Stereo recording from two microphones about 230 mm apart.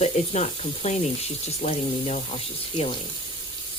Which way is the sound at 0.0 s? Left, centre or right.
Left.